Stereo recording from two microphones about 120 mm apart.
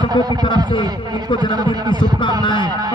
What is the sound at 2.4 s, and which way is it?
Speech, 40° left (ahead or behind).